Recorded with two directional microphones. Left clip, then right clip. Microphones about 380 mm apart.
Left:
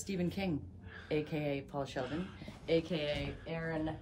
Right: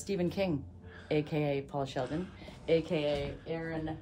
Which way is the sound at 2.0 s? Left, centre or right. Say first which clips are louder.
Right 4 dB; centre.